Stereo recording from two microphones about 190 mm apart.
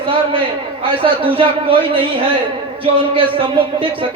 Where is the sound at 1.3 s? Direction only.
30° right (ahead or behind).